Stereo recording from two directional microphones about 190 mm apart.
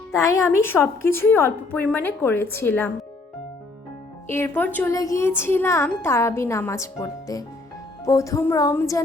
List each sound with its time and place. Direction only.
0.1 s speech: 15° left (ahead or behind)
4.3 s speech: 10° left (ahead or behind)